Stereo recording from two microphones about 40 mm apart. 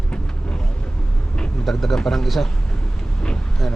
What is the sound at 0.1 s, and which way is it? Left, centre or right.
Vehicle, left.